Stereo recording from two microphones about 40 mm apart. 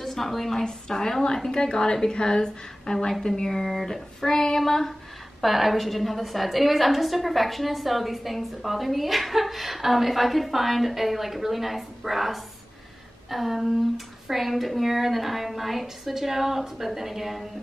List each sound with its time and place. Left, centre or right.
0.0 s a woman's voice: centre